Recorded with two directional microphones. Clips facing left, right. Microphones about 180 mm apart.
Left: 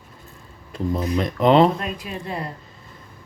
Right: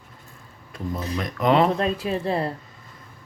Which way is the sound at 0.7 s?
30° left (ahead or behind).